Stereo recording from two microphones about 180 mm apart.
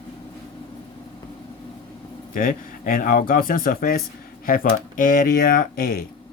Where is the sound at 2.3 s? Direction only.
50° left (ahead or behind).